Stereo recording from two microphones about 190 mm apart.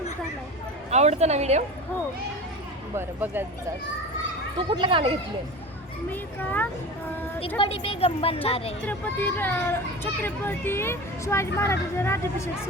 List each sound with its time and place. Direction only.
0.9 s speech: 35° right (ahead or behind)
2.9 s speech: 10° right (ahead or behind)
4.5 s speech: 25° right (ahead or behind)
6.1 s a child's voice: 10° left (ahead or behind)
7.6 s speech: 30° left (ahead or behind)
8.9 s a child's voice: 10° left (ahead or behind)